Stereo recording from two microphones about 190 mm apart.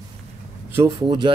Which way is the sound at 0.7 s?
15° right (ahead or behind).